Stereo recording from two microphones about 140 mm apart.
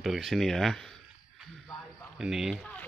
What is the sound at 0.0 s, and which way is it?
Speech, centre (ahead or behind).